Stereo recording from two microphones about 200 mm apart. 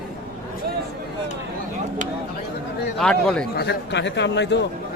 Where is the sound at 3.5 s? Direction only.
60° left (ahead or behind).